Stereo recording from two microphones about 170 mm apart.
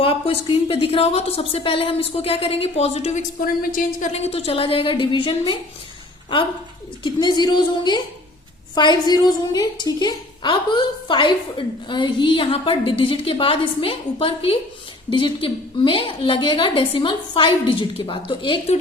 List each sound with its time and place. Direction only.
0.0 s a woman's voice: 35° left (ahead or behind)
3.4 s a woman's voice: 55° left (ahead or behind)
4.1 s a woman's voice: 35° left (ahead or behind)
7.0 s a woman's voice: 25° left (ahead or behind)